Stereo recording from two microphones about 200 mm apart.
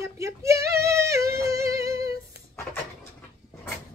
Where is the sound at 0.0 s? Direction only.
15° right (ahead or behind).